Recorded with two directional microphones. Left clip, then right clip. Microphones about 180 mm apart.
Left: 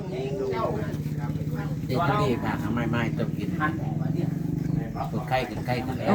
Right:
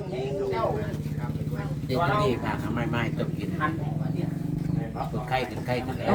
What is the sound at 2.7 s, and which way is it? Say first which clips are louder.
Speech: left 1 dB; 50° left (ahead or behind).